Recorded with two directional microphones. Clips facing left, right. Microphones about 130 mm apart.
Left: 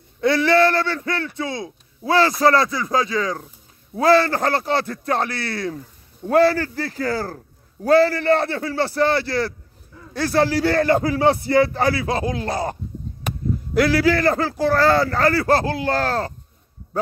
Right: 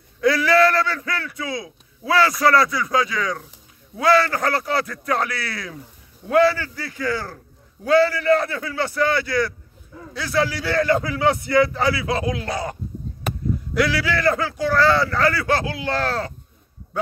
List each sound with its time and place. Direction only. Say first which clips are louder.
0.2 s a man's voice: left 1 dB; 25° left (ahead or behind)
6.2 s a man's voice: left 1 dB; 40° left (ahead or behind)
11.8 s a man's voice: left 1 dB; 40° left (ahead or behind)
13.7 s a man's voice: left 5 dB; 45° left (ahead or behind)